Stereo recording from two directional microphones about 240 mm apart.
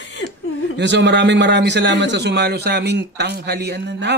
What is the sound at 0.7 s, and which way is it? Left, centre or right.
A man's voice, right.